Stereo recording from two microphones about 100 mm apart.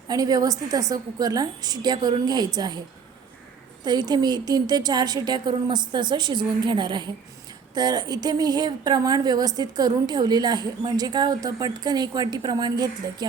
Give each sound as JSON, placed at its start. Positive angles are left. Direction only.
{"t": 0.1, "sound": "a woman's voice", "side_deg": -40}
{"t": 3.8, "sound": "a woman's voice", "side_deg": -45}